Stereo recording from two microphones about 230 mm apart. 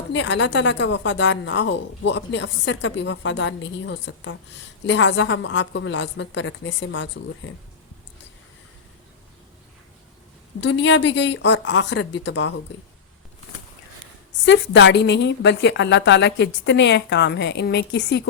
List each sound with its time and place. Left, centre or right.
0.1 s a woman's voice: left
10.6 s a woman's voice: left
14.4 s a woman's voice: left